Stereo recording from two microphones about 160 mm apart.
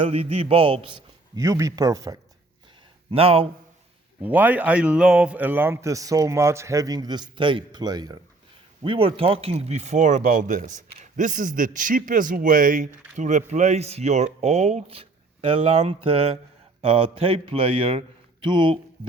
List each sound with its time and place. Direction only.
0.0 s speech: 40° right (ahead or behind)
1.4 s speech: 20° right (ahead or behind)
3.1 s speech: 35° right (ahead or behind)
4.2 s speech: 10° right (ahead or behind); by 18.8 s 30° right (ahead or behind)